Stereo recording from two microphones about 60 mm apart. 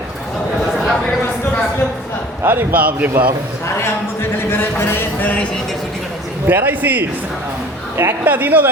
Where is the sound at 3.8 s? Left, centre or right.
Left.